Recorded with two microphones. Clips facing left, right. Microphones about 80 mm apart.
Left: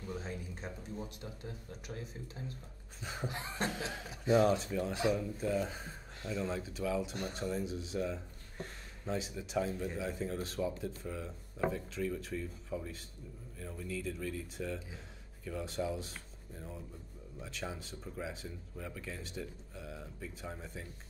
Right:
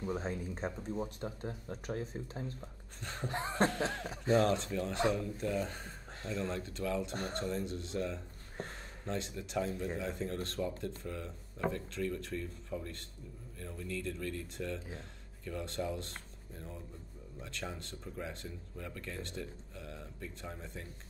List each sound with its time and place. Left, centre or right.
0.0 s speech: right
3.0 s speech: centre
3.3 s speech: right
4.3 s speech: centre
8.6 s speech: right
9.0 s speech: centre